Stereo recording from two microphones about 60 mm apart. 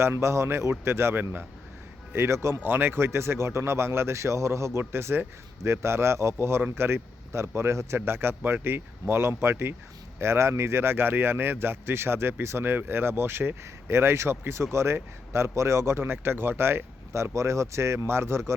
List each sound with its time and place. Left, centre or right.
0.0 s speech: right
2.1 s speech: right
2.6 s speech: right